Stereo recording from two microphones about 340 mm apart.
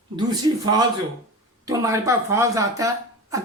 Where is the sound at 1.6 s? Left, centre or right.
Centre.